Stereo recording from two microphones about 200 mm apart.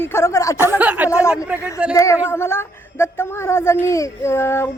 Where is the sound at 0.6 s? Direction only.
10° right (ahead or behind).